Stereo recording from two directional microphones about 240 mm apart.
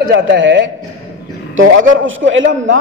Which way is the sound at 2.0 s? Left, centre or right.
Right.